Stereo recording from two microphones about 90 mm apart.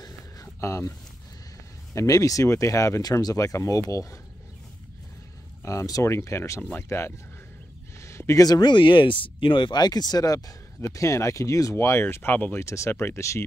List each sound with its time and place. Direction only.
0.0 s a sound: 35° left (ahead or behind)
2.0 s speech: 40° left (ahead or behind)
5.7 s speech: 40° left (ahead or behind)
8.0 s a sound: 35° left (ahead or behind)
8.5 s speech: 60° left (ahead or behind); by 12.6 s 20° left (ahead or behind)
12.6 s speech: 35° left (ahead or behind)